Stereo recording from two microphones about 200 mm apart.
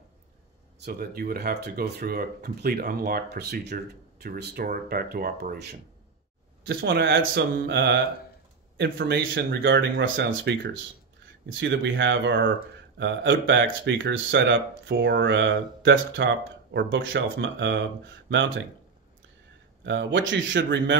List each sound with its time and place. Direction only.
0.7 s speech: 50° right (ahead or behind)
19.8 s speech: 65° right (ahead or behind)